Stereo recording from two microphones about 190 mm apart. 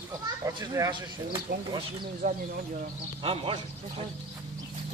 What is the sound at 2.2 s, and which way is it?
Speech, 45° right (ahead or behind).